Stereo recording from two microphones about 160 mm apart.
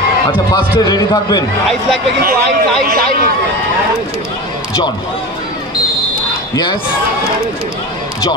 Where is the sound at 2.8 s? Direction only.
65° right (ahead or behind).